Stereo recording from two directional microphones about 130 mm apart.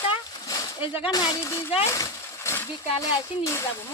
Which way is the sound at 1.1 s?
35° left (ahead or behind).